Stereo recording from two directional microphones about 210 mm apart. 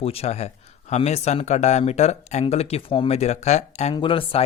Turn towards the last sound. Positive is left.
turn(degrees=25)  # may be behind; listen again after turning